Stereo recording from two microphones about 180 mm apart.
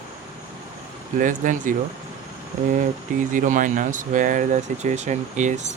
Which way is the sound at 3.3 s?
45° right (ahead or behind).